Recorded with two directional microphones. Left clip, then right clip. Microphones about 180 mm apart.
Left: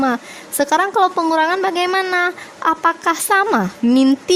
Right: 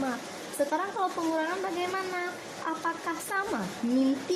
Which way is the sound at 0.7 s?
60° left (ahead or behind).